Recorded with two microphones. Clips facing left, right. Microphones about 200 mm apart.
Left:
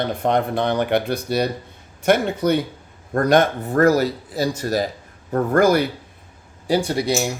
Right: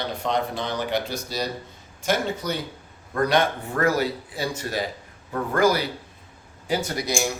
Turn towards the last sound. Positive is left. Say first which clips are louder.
# left 6 dB
turn(degrees=30)  # may be behind; listen again after turning